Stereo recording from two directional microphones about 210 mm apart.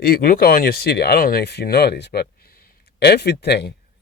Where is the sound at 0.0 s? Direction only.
45° left (ahead or behind).